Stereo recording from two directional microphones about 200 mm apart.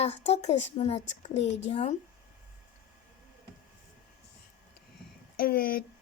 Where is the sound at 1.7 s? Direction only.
30° left (ahead or behind).